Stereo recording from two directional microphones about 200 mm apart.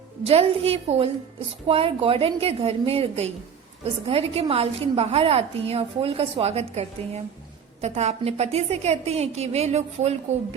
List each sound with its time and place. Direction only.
0.3 s a woman's voice: 30° right (ahead or behind)